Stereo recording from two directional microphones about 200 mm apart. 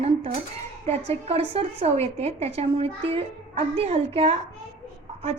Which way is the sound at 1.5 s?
30° right (ahead or behind).